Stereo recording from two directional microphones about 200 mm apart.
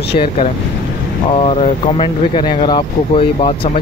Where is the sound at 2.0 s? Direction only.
25° left (ahead or behind).